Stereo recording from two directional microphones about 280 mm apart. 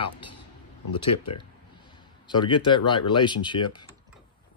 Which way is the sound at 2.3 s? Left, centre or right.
Centre.